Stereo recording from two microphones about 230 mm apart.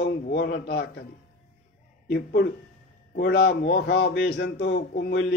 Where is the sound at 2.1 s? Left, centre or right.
Left.